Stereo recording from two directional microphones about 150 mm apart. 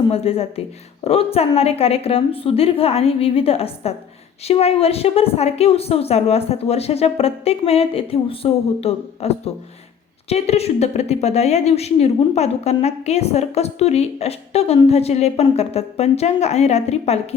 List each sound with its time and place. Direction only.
0.1 s a woman's voice: 40° left (ahead or behind)